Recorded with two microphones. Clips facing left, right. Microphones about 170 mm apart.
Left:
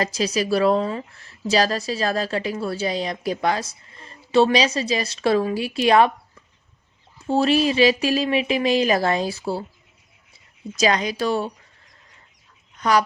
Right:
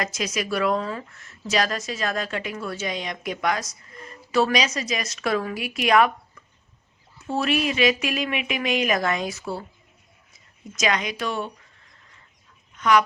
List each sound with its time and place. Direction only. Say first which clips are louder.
0.0 s a woman's voice: left 5 dB; 30° left (ahead or behind)
7.2 s a woman's voice: left 5 dB; 30° left (ahead or behind)
10.8 s a woman's voice: left 4 dB; 35° left (ahead or behind)
12.7 s speech: even; 35° left (ahead or behind)